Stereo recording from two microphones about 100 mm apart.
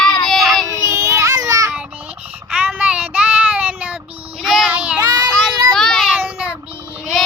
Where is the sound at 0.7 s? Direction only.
30° right (ahead or behind).